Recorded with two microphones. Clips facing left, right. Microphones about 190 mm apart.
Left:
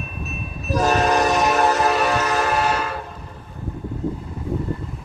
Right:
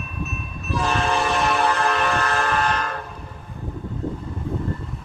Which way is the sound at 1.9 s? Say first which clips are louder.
Left 3 dB; 5° left (ahead or behind).